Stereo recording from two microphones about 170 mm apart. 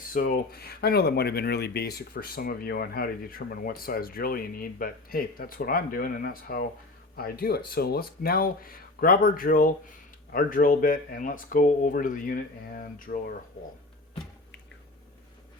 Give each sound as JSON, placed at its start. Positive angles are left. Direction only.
{"t": 0.1, "sound": "speech", "side_deg": 55}